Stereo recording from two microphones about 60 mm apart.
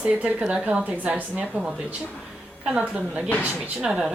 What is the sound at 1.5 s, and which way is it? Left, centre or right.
Speech, centre.